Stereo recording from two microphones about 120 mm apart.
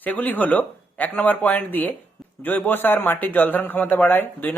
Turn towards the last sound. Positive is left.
turn(degrees=15)  # may be behind; listen again after turning